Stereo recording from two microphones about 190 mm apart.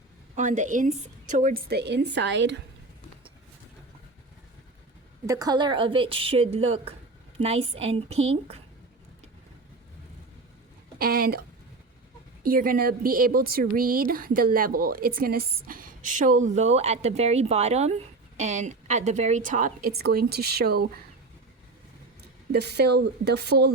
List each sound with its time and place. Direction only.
0.3 s speech: 40° right (ahead or behind); by 2.6 s 70° right (ahead or behind)
5.2 s a woman's voice: 15° right (ahead or behind)
10.9 s speech: 50° right (ahead or behind)
12.4 s speech: 45° right (ahead or behind)
22.2 s speech: 60° right (ahead or behind)